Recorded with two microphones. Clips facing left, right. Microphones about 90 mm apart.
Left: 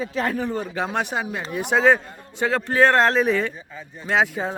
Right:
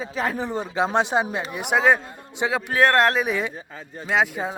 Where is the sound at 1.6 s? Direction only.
10° right (ahead or behind).